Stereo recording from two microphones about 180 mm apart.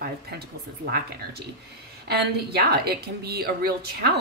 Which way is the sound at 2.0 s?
60° right (ahead or behind).